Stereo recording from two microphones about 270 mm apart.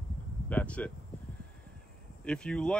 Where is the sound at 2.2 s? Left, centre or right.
Centre.